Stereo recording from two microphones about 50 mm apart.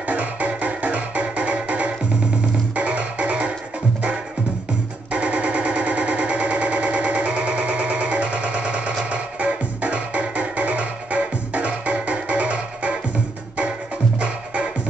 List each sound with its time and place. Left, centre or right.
0.0 s music: right
5.1 s a sound: right
9.1 s music: right
14.2 s music: right